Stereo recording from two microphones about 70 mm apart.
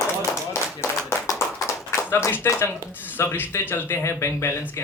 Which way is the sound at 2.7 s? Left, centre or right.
Left.